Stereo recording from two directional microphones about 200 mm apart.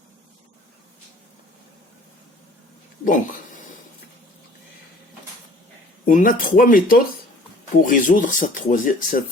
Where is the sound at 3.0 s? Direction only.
40° left (ahead or behind).